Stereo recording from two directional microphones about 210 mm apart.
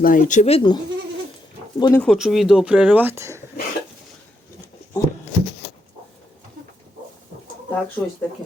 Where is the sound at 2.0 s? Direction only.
Centre (ahead or behind).